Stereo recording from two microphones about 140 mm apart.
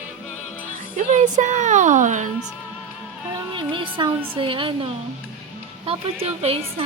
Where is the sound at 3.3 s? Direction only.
35° right (ahead or behind).